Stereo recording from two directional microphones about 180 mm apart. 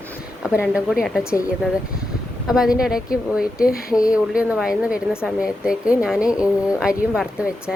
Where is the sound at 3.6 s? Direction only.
55° left (ahead or behind).